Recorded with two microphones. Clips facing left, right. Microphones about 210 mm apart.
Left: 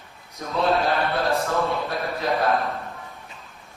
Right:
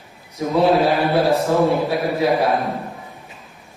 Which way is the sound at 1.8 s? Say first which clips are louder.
Right 8 dB; 10° right (ahead or behind).